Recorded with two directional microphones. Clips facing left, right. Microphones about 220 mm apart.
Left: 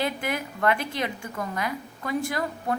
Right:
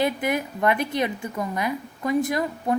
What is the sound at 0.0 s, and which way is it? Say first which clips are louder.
A woman's voice: right 5 dB; 20° right (ahead or behind).